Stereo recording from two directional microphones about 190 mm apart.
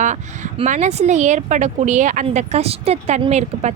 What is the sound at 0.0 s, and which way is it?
A woman's voice, 40° right (ahead or behind).